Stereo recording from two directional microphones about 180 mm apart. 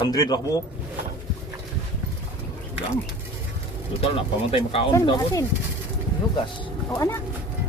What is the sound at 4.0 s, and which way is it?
Speech, 30° left (ahead or behind).